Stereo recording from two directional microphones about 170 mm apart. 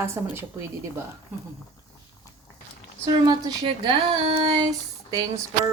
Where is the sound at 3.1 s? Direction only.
25° right (ahead or behind).